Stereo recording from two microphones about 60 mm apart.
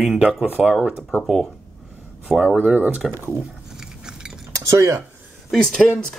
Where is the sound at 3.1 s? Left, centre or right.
Right.